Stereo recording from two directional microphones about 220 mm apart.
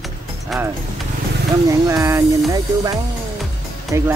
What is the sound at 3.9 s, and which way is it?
Speech, 15° right (ahead or behind).